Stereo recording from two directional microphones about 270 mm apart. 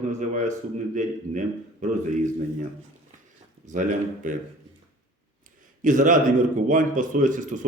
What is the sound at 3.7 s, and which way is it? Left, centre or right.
Speech, right.